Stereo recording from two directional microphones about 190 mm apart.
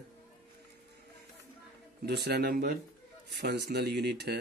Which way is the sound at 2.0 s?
60° right (ahead or behind).